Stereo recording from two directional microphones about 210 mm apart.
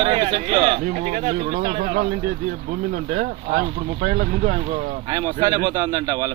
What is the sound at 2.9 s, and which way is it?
Speech, 40° right (ahead or behind).